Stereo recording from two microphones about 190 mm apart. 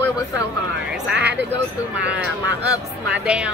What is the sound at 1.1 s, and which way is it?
Speech, 65° right (ahead or behind).